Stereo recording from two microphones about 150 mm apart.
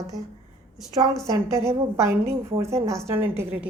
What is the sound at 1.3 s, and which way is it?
A woman's voice, 20° right (ahead or behind).